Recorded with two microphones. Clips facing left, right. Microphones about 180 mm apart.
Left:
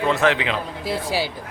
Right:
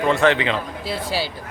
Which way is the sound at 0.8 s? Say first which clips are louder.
Left 2 dB; 15° left (ahead or behind).